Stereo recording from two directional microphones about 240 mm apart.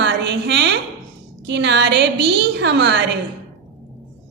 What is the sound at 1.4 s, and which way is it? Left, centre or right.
A woman's voice, right.